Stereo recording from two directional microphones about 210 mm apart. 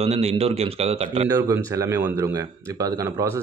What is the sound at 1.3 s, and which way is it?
Speech, 15° right (ahead or behind).